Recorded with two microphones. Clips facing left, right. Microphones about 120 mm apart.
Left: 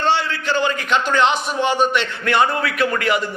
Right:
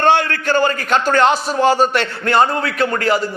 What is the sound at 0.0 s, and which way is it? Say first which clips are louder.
A man's voice: right 5 dB; 50° right (ahead or behind).